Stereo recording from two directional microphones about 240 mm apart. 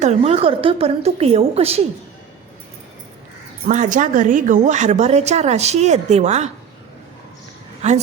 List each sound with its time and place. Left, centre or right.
0.0 s a woman's voice: right
3.7 s a woman's voice: right
7.8 s a woman's voice: right